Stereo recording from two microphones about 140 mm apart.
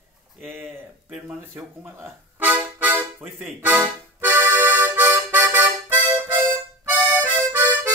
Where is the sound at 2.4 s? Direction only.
10° right (ahead or behind).